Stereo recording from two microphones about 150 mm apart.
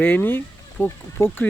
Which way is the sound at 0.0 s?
15° left (ahead or behind).